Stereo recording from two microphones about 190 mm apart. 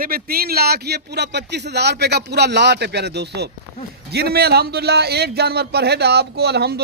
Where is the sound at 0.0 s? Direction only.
50° right (ahead or behind).